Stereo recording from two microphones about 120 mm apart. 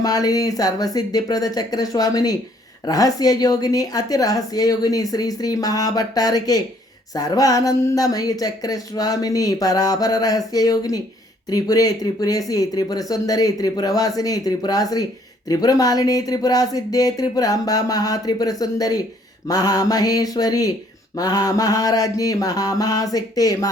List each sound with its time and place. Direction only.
0.0 s speech: 30° left (ahead or behind)